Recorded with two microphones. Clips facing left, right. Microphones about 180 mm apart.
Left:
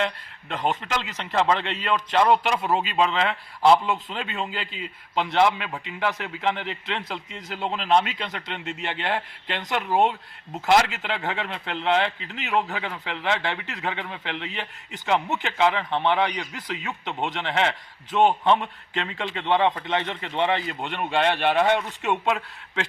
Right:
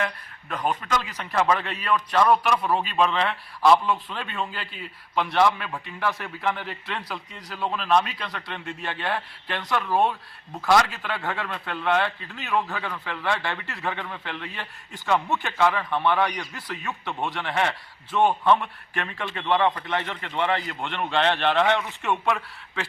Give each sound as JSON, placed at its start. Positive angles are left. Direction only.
{"t": 0.0, "sound": "a man's voice", "side_deg": 25}